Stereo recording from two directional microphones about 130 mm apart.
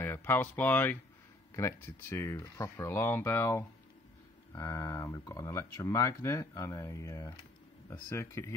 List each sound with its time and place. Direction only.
0.0 s speech: 15° left (ahead or behind)